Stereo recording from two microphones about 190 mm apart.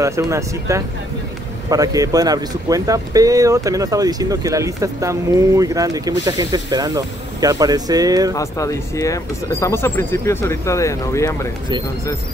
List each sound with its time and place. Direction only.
0.0 s speech: 15° right (ahead or behind)
8.4 s speech: 15° left (ahead or behind)